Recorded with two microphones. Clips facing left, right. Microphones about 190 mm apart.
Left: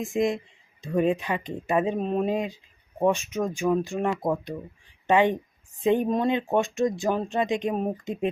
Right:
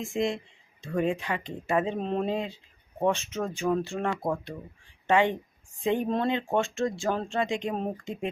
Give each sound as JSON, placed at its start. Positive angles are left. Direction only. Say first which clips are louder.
{"t": 0.0, "sound": "speech", "louder": "left 4 dB", "side_deg": 20}